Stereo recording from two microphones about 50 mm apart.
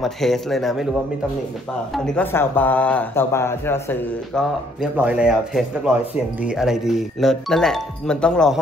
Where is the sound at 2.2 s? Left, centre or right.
Left.